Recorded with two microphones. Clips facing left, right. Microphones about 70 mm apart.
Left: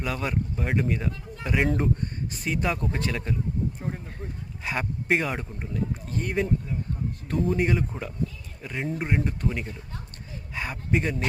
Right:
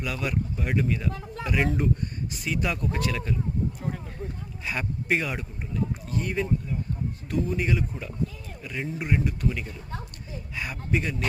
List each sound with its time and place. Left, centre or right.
0.0 s speech: left
4.6 s speech: left
7.5 s speech: left